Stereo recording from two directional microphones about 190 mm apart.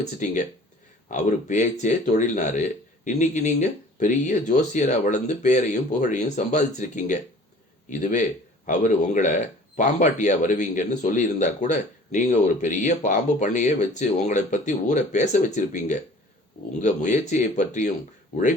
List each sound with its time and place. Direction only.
0.0 s speech: 40° left (ahead or behind)